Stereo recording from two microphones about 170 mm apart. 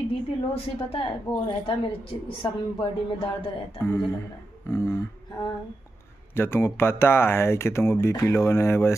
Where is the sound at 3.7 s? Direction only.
10° left (ahead or behind).